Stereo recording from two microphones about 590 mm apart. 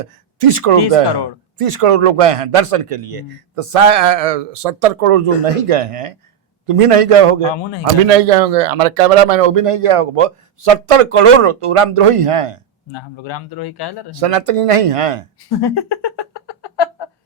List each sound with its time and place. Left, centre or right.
0.0 s speech: right
12.9 s speech: left
14.2 s speech: right
15.4 s speech: left